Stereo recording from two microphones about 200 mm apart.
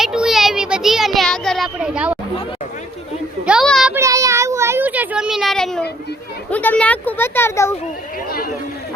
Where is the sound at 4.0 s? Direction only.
15° right (ahead or behind); by 5.8 s centre (ahead or behind).